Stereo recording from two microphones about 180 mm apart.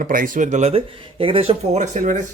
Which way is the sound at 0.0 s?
50° right (ahead or behind).